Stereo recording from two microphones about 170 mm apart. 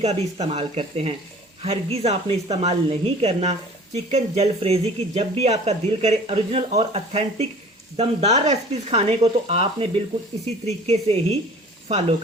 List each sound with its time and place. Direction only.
0.0 s speech: 40° right (ahead or behind)
10.7 s speech: 40° right (ahead or behind)